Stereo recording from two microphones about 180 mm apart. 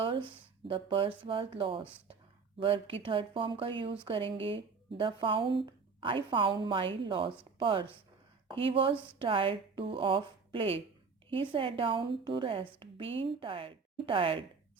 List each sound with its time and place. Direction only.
0.0 s speech: 30° right (ahead or behind)